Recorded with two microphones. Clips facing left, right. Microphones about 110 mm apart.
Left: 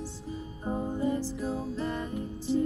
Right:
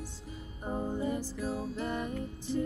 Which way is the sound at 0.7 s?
10° left (ahead or behind).